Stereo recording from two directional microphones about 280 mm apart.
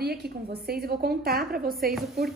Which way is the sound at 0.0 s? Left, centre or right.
Right.